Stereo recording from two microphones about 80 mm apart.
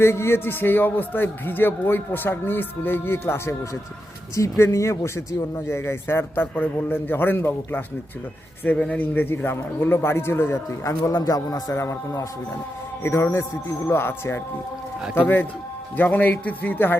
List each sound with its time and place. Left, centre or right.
0.0 s a man's voice: left
11.7 s a man's voice: left
16.0 s a man's voice: left